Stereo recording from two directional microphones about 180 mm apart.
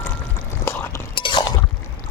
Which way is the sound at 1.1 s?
25° left (ahead or behind).